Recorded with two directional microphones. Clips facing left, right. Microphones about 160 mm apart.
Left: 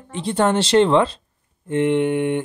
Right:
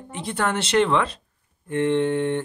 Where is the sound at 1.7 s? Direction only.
15° left (ahead or behind).